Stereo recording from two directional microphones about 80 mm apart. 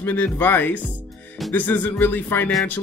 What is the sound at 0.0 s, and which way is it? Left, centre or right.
Speech, left.